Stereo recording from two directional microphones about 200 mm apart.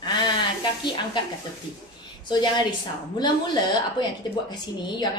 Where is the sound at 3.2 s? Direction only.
20° left (ahead or behind).